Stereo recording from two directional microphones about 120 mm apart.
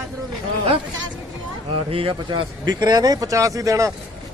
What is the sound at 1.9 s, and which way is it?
Speech, 50° right (ahead or behind).